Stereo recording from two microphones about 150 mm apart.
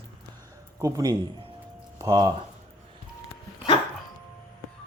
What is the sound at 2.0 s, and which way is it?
Speech, 25° right (ahead or behind).